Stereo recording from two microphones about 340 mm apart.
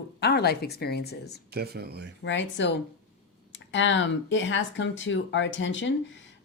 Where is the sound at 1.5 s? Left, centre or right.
Right.